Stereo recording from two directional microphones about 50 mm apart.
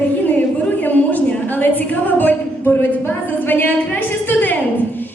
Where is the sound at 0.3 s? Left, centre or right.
Left.